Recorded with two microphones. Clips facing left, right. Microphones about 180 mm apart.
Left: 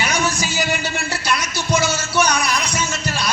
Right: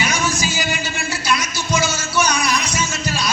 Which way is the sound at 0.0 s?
60° left (ahead or behind).